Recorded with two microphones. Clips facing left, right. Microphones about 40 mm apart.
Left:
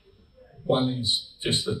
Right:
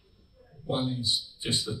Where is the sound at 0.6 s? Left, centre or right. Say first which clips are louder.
Left 6 dB; left.